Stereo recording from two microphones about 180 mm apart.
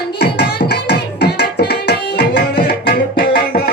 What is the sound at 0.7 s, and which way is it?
Music, 65° left (ahead or behind).